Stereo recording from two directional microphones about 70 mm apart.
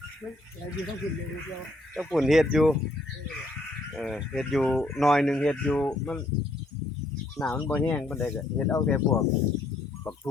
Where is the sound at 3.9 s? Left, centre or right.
Centre.